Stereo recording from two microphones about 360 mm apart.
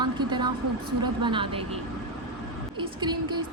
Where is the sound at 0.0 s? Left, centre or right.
Centre.